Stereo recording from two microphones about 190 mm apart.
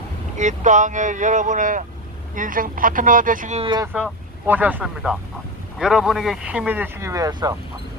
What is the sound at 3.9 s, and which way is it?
A man's voice, 10° right (ahead or behind).